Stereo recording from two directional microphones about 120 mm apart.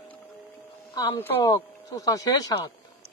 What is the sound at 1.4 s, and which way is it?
Speech, 30° left (ahead or behind).